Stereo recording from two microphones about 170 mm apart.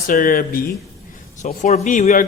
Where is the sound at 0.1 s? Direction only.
55° left (ahead or behind).